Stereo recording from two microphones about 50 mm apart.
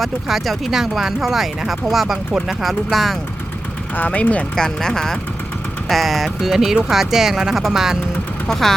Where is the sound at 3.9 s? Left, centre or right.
Left.